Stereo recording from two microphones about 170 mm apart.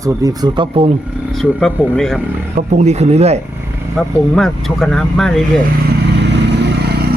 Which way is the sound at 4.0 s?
Centre (ahead or behind).